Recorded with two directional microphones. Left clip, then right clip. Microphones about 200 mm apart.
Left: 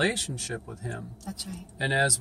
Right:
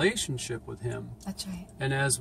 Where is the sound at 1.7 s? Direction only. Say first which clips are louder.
Left 5 dB; 20° left (ahead or behind).